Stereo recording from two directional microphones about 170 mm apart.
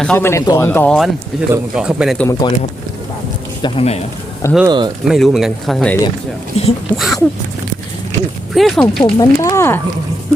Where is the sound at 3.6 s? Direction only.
35° left (ahead or behind).